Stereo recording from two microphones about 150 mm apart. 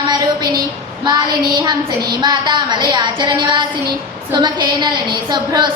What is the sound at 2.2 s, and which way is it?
A woman's voice, 30° right (ahead or behind).